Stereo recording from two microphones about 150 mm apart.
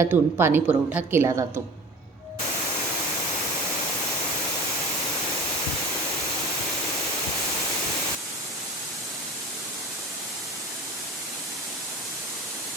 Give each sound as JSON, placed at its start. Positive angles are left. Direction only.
{"t": 0.0, "sound": "a woman's voice", "side_deg": -15}